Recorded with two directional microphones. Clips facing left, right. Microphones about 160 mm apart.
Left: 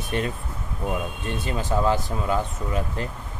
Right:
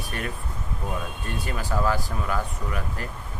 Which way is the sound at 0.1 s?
20° left (ahead or behind).